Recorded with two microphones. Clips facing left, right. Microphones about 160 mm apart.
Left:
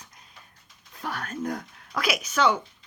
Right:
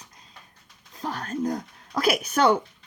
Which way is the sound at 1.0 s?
35° right (ahead or behind).